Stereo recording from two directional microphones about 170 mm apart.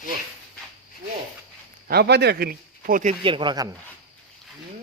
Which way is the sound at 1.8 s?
65° right (ahead or behind).